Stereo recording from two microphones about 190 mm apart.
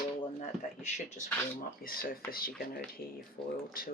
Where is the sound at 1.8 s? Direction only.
50° left (ahead or behind).